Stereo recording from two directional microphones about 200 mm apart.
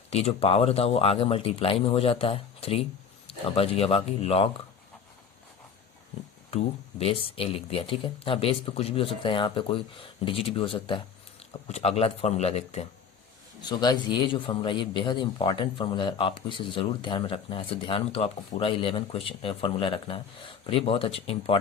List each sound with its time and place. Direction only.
0.1 s a man's voice: 30° left (ahead or behind)
7.0 s a man's voice: 30° left (ahead or behind)
13.6 s a man's voice: 20° left (ahead or behind)